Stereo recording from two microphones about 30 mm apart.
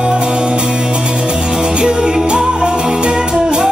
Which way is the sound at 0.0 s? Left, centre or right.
Right.